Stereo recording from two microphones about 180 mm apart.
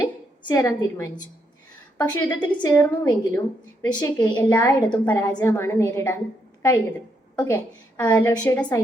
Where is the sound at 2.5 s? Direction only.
10° left (ahead or behind).